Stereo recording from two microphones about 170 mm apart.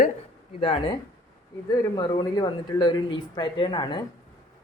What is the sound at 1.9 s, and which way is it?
Speech, 25° left (ahead or behind).